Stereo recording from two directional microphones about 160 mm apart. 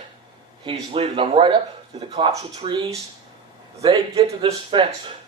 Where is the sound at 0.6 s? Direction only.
35° right (ahead or behind).